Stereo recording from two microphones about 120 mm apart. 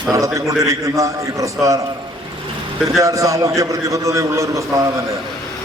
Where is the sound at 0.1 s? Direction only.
25° right (ahead or behind).